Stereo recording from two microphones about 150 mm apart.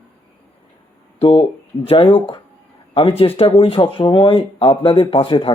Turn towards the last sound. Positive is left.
turn(degrees=35)  # may be behind; listen again after turning